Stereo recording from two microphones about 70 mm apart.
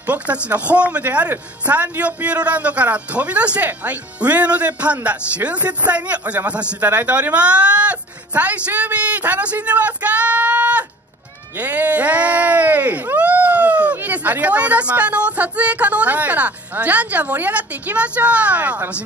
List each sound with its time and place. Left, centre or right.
0.0 s a man's voice: right